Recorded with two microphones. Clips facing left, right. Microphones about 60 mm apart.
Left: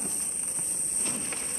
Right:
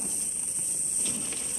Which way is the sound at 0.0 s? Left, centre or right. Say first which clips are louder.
Left 2 dB; left.